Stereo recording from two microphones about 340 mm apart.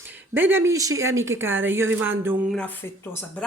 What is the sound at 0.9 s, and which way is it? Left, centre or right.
Speech, right.